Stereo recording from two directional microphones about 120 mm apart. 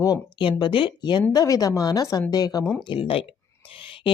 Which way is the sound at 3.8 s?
45° left (ahead or behind).